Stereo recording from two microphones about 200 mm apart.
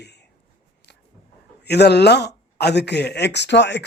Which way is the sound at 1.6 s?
55° left (ahead or behind).